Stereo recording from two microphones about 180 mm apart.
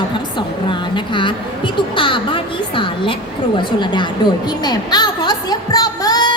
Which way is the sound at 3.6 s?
25° left (ahead or behind).